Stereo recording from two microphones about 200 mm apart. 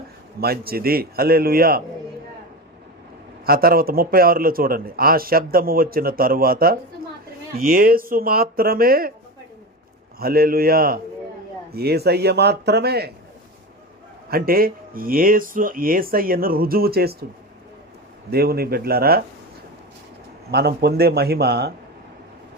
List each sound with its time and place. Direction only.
0.3 s speech: 50° right (ahead or behind)
3.4 s speech: 50° right (ahead or behind)
10.2 s speech: 50° right (ahead or behind)
14.3 s speech: 50° right (ahead or behind)
18.3 s speech: 50° right (ahead or behind)
20.5 s speech: 55° right (ahead or behind)